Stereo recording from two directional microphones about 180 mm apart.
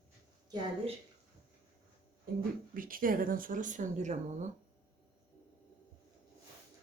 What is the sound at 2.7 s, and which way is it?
Speech, 50° right (ahead or behind).